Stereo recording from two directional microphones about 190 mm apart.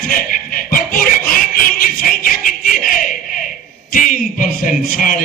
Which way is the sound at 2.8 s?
45° left (ahead or behind).